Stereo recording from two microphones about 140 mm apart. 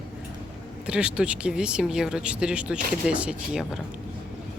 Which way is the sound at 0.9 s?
5° right (ahead or behind).